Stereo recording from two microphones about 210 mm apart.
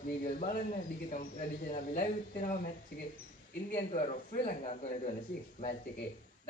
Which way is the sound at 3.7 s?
35° left (ahead or behind).